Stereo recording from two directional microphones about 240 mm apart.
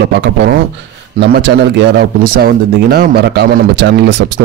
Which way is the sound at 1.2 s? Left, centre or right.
Right.